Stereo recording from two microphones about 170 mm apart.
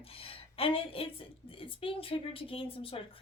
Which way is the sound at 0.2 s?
35° left (ahead or behind).